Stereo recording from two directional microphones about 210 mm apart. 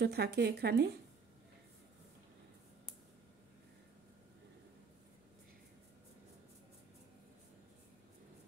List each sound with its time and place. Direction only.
0.0 s speech: 50° right (ahead or behind)